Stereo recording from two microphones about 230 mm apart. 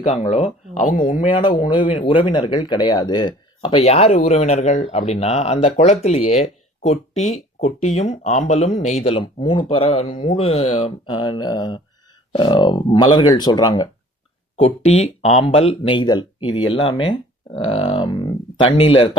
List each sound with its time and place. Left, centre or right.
0.0 s speech: left
1.1 s speech: left